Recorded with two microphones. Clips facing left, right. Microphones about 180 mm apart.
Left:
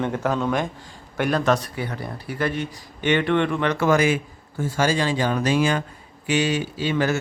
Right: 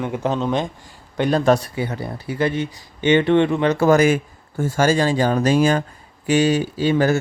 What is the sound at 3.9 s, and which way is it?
Speech, 45° right (ahead or behind).